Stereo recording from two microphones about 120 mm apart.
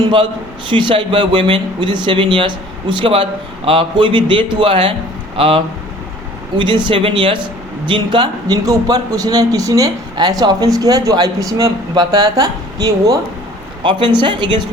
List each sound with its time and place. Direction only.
0.7 s a man's voice: 40° right (ahead or behind)